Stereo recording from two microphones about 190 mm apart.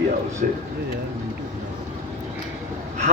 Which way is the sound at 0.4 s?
45° right (ahead or behind).